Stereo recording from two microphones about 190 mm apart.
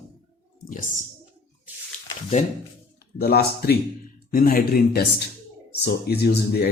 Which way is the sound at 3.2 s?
55° left (ahead or behind).